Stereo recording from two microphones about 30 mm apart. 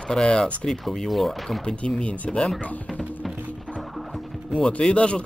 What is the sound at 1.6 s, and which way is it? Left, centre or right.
Speech, left.